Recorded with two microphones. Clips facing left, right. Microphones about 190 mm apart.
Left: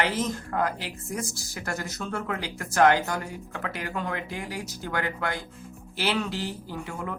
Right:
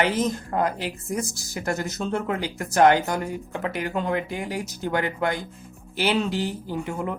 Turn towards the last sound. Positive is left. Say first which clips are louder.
# right 6 dB
turn(degrees=-20)  # may be behind; listen again after turning